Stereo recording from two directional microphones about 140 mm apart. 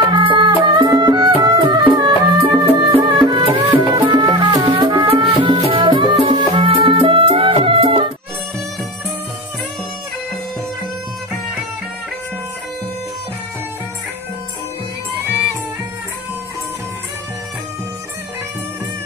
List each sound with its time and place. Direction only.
0.1 s music: 35° right (ahead or behind)